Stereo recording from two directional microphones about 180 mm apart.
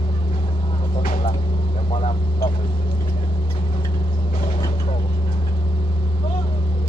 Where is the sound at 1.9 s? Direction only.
30° left (ahead or behind).